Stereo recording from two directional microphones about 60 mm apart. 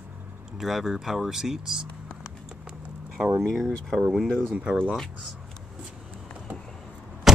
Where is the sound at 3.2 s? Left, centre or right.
Centre.